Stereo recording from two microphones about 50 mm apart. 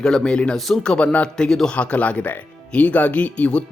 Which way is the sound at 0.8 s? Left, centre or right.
Centre.